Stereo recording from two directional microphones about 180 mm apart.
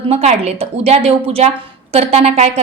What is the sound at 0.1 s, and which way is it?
A woman's voice, 35° right (ahead or behind).